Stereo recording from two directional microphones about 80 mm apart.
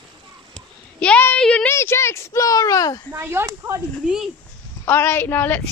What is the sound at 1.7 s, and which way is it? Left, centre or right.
A woman's voice, left.